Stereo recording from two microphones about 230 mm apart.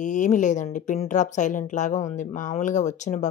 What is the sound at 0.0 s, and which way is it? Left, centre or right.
Speech, left.